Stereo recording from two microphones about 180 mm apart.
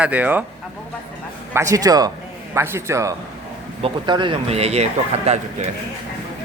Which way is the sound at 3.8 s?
30° right (ahead or behind).